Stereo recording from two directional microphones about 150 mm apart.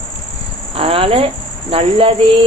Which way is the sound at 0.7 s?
40° right (ahead or behind).